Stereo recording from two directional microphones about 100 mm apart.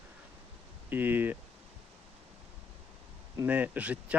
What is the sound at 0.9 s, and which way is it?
Speech, 20° right (ahead or behind).